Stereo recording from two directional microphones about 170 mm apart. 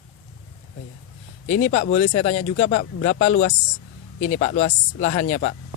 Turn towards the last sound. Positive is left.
turn(degrees=45)  # may be behind; listen again after turning